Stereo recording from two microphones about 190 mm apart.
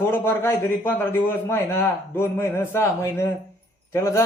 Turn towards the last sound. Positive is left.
turn(degrees=15)  # may be behind; listen again after turning